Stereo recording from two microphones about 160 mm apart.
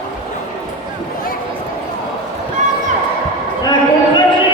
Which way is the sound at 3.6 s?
25° left (ahead or behind).